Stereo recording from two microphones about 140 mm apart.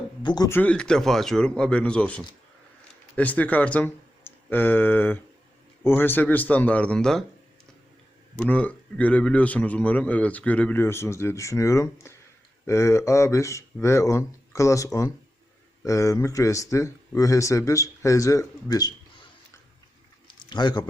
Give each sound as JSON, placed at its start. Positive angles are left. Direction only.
{"t": 0.2, "sound": "speech", "side_deg": 30}
{"t": 0.4, "sound": "a man's voice", "side_deg": 15}
{"t": 8.4, "sound": "a man's voice", "side_deg": 10}
{"t": 20.2, "sound": "a sound", "side_deg": 30}